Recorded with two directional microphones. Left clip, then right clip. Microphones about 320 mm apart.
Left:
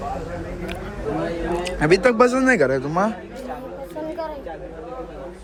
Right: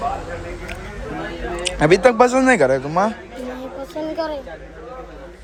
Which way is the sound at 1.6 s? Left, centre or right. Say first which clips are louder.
Right 4 dB; centre.